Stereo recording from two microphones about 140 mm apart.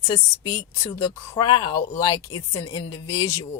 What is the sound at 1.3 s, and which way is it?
Speech, 35° left (ahead or behind).